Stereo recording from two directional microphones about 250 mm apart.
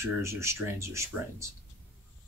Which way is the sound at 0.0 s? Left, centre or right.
Centre.